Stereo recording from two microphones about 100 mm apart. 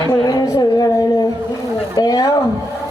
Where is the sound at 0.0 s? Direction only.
40° left (ahead or behind).